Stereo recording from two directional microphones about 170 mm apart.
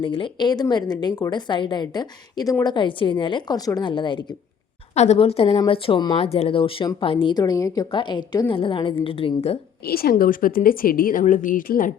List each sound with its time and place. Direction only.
0.0 s a woman's voice: 30° left (ahead or behind)
4.9 s speech: 40° left (ahead or behind)
9.8 s a woman's voice: 65° left (ahead or behind)